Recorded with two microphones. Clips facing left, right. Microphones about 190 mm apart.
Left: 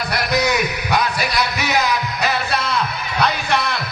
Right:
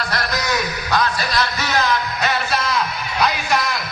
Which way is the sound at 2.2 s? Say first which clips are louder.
Left 1 dB; 5° right (ahead or behind).